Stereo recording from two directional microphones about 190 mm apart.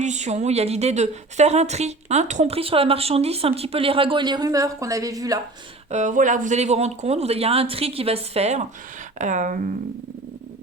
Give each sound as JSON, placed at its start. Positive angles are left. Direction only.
{"t": 0.0, "sound": "a woman's voice", "side_deg": -35}
{"t": 5.9, "sound": "a woman's voice", "side_deg": -40}